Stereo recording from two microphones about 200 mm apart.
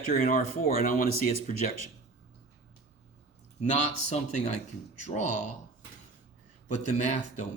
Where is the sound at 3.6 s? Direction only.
35° left (ahead or behind).